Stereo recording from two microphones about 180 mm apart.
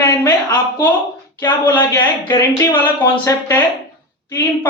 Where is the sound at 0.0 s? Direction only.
20° left (ahead or behind).